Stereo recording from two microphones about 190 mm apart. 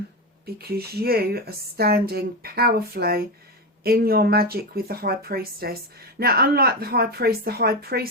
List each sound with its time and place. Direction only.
0.4 s a woman's voice: 55° right (ahead or behind)